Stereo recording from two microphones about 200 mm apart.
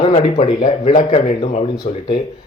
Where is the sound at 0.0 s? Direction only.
30° left (ahead or behind).